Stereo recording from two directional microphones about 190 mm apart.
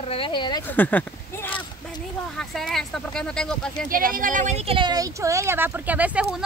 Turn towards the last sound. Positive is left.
turn(degrees=-5)  # may be behind; listen again after turning